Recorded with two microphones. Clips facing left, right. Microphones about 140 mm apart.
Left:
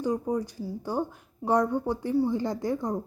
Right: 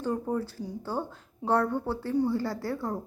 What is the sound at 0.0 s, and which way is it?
A woman's voice, 15° left (ahead or behind).